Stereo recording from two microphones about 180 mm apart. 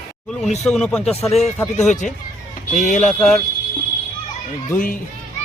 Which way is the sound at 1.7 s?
40° left (ahead or behind).